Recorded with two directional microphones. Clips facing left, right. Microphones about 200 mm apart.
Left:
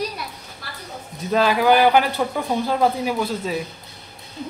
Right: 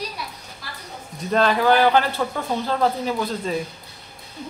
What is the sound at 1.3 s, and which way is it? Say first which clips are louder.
Speech: left 1 dB; 5° left (ahead or behind).